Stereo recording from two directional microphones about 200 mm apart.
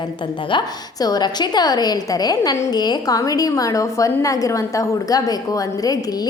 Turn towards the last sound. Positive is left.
turn(degrees=20)  # may be behind; listen again after turning